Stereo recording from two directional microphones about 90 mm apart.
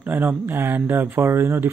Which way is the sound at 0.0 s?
20° right (ahead or behind).